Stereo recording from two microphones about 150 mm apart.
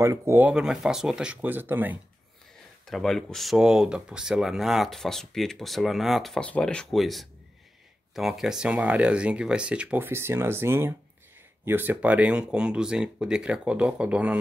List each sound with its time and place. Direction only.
0.0 s speech: 20° right (ahead or behind)
0.5 s speech: 5° right (ahead or behind)
2.9 s speech: centre (ahead or behind)